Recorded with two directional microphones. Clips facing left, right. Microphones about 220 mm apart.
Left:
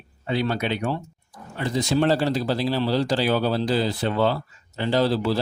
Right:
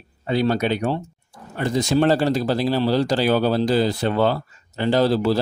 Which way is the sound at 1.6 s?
50° right (ahead or behind).